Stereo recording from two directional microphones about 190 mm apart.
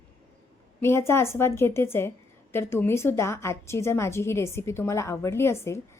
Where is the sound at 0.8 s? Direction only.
15° left (ahead or behind).